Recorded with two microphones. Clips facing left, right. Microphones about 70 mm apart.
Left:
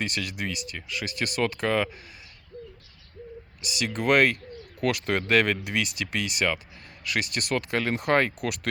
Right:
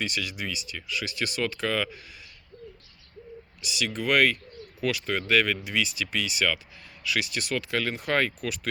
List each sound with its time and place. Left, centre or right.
0.0 s speech: left
3.6 s speech: left
8.4 s speech: left